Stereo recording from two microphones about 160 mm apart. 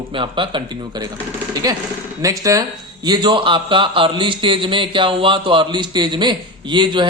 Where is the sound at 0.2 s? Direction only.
30° right (ahead or behind).